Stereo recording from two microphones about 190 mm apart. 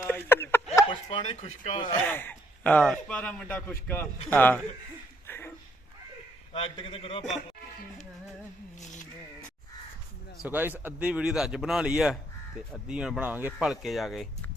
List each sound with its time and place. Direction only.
0.0 s a sound: 10° left (ahead or behind)
1.1 s a man's voice: 30° left (ahead or behind)
2.0 s speech: 10° left (ahead or behind)
5.2 s a sound: 10° left (ahead or behind)
6.5 s a man's voice: 30° left (ahead or behind)
10.4 s speech: 10° right (ahead or behind)